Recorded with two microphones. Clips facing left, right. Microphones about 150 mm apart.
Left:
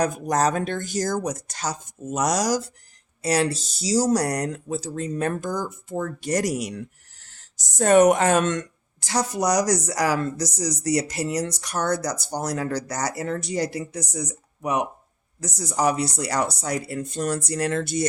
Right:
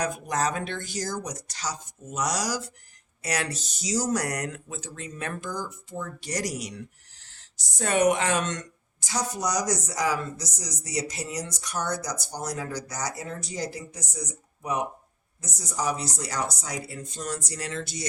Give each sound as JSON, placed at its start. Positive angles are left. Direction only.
{"t": 0.0, "sound": "speech", "side_deg": 40}
{"t": 3.2, "sound": "a woman's voice", "side_deg": 30}